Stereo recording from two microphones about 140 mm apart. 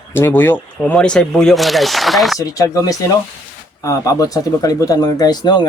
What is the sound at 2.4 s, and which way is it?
Speech, 25° left (ahead or behind).